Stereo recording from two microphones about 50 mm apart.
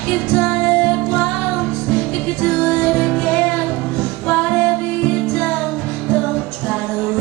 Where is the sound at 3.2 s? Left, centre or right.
Left.